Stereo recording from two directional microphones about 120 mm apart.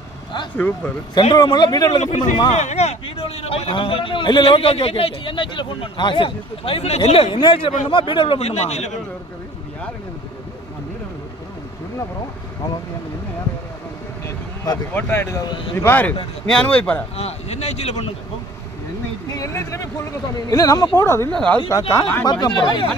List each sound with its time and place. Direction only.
0.6 s speech: 15° left (ahead or behind)
1.3 s speech: 35° left (ahead or behind)
2.0 s a man's voice: 65° left (ahead or behind); by 8.4 s 45° left (ahead or behind)
8.4 s speech: 65° left (ahead or behind)
14.2 s vehicle: 30° left (ahead or behind)
15.0 s speech: 20° left (ahead or behind)
15.4 s a man's voice: 45° left (ahead or behind)
15.7 s speech: 15° left (ahead or behind)
17.2 s speech: 60° left (ahead or behind)
19.3 s speech: 25° left (ahead or behind)
21.3 s speech: 10° left (ahead or behind)
21.6 s speech: 25° left (ahead or behind)